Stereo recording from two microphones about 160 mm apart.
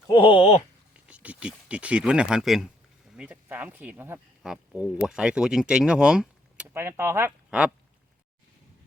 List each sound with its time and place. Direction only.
0.1 s speech: 30° left (ahead or behind)
0.9 s speech: 10° right (ahead or behind)
6.7 s speech: 15° right (ahead or behind)